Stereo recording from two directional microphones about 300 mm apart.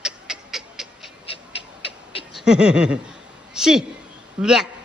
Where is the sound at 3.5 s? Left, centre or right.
Centre.